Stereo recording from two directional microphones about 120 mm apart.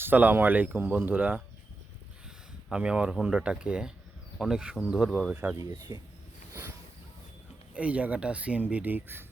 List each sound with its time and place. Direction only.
0.0 s speech: 15° right (ahead or behind)
2.6 s speech: 5° right (ahead or behind)
5.9 s speech: 35° right (ahead or behind)
7.7 s speech: 10° right (ahead or behind)